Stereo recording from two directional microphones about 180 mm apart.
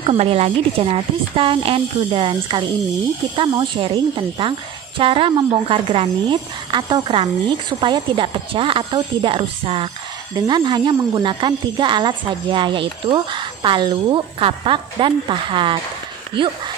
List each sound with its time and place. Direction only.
0.0 s a woman's voice: 35° right (ahead or behind)